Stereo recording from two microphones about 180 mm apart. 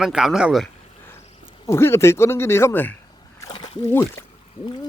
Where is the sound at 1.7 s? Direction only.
15° left (ahead or behind).